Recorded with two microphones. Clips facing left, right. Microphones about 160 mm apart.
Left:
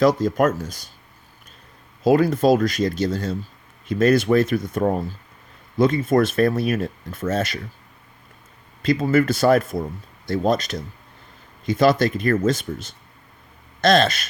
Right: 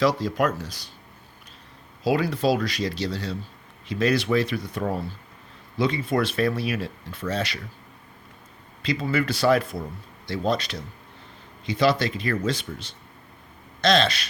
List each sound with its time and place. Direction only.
0.0 s speech: 45° left (ahead or behind)
2.0 s speech: 45° left (ahead or behind)
8.8 s speech: 45° left (ahead or behind)